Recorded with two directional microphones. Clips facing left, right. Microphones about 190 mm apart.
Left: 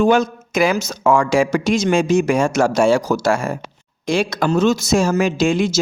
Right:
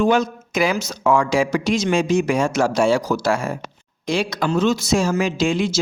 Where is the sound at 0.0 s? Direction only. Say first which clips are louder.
Left 3 dB; 50° left (ahead or behind).